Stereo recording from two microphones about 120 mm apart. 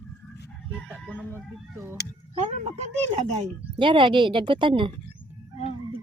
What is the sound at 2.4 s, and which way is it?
Speech, 70° right (ahead or behind).